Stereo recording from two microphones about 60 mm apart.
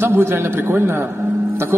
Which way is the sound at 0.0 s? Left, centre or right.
Right.